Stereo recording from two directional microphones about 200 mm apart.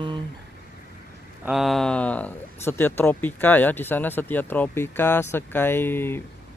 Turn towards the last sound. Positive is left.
turn(degrees=10)  # may be behind; listen again after turning